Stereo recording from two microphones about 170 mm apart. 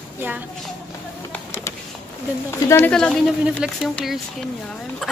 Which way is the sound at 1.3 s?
15° left (ahead or behind).